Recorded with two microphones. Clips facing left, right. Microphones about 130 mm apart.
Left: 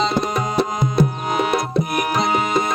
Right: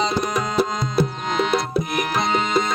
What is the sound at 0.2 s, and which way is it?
Tabla, 25° left (ahead or behind).